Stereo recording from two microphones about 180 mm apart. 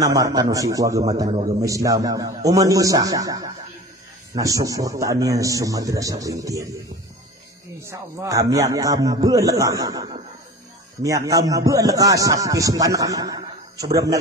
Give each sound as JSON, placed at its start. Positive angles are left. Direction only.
{"t": 0.0, "sound": "speech", "side_deg": -20}
{"t": 1.3, "sound": "a man's voice", "side_deg": -30}
{"t": 1.6, "sound": "speech", "side_deg": -20}
{"t": 7.8, "sound": "speech", "side_deg": -15}